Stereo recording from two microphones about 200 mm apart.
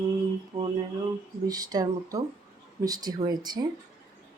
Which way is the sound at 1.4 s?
20° right (ahead or behind).